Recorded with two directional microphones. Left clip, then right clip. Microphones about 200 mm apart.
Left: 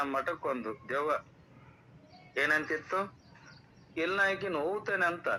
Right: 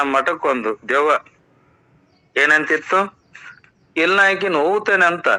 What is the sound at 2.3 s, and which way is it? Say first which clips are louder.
A man's voice: right 15 dB; 45° right (ahead or behind).